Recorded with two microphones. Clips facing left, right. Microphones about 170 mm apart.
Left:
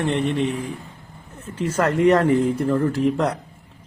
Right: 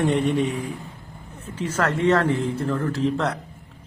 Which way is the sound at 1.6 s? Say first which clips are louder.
Left 4 dB; 10° left (ahead or behind).